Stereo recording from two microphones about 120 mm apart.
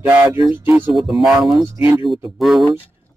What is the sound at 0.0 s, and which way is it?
Speech, 15° right (ahead or behind).